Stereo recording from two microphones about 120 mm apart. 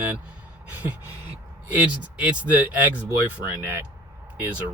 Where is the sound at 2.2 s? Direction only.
10° right (ahead or behind).